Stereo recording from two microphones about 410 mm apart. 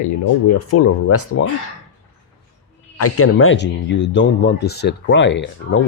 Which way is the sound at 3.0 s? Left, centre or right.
Left.